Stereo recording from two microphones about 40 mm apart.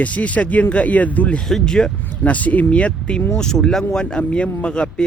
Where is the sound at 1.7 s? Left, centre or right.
Centre.